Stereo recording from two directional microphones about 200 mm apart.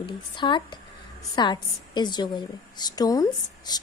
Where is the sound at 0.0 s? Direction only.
25° left (ahead or behind).